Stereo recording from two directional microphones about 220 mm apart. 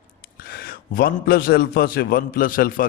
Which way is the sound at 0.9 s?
40° left (ahead or behind).